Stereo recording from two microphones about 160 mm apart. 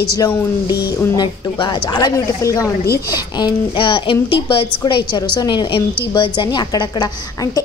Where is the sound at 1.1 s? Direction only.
25° left (ahead or behind).